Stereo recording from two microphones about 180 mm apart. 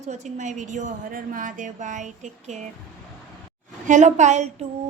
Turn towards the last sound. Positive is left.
turn(degrees=-40)  # may be behind; listen again after turning